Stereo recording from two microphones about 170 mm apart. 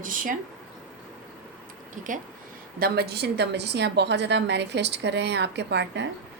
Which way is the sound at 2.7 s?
65° right (ahead or behind).